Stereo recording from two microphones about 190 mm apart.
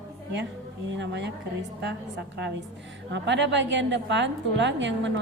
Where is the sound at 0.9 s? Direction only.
70° right (ahead or behind).